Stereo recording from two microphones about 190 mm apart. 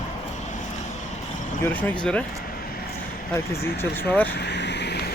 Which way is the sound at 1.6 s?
10° left (ahead or behind).